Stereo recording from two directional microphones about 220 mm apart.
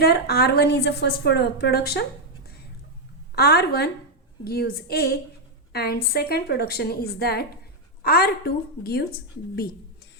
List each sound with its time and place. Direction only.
0.0 s a woman's voice: 45° left (ahead or behind)
3.3 s a woman's voice: 45° left (ahead or behind)